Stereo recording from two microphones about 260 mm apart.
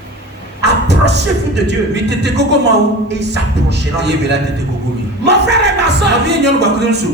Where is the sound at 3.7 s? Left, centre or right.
Right.